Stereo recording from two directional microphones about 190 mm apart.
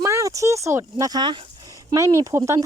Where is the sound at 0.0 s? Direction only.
15° right (ahead or behind).